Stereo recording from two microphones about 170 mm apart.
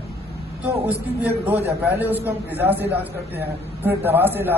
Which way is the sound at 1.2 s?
10° right (ahead or behind).